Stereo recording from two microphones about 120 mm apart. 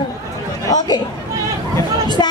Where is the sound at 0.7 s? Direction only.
35° left (ahead or behind).